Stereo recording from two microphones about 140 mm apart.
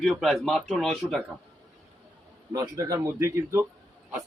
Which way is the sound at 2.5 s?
25° right (ahead or behind).